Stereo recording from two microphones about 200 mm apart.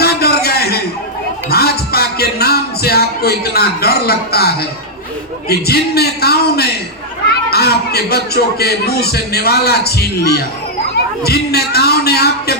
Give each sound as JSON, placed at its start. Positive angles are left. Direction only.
{"t": 0.0, "sound": "a sound", "side_deg": 50}
{"t": 1.5, "sound": "music", "side_deg": 50}
{"t": 5.5, "sound": "speech", "side_deg": 50}